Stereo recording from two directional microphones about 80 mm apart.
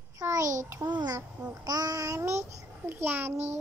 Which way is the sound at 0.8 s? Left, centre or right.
Right.